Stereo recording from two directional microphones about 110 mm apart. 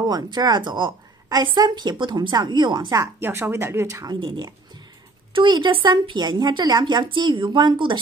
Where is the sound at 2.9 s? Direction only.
20° right (ahead or behind).